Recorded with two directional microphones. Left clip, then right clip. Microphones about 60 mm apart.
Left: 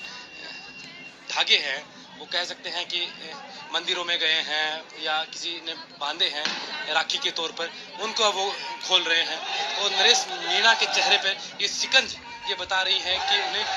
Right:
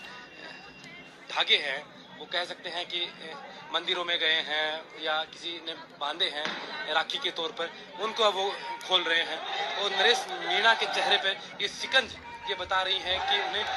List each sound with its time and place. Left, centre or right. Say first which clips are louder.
1.3 s a man's voice: left 4 dB; centre